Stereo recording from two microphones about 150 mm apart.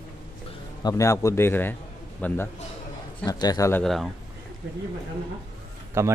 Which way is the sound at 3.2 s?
25° left (ahead or behind).